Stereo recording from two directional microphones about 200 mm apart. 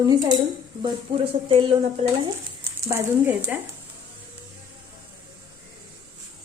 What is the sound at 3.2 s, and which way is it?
Speech, 10° right (ahead or behind).